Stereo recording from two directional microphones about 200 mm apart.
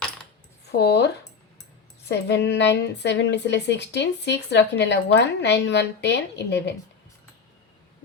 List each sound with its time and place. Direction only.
0.8 s a woman's voice: 55° left (ahead or behind)